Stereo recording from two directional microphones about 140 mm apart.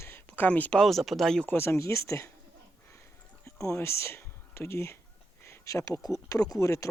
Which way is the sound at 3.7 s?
20° left (ahead or behind).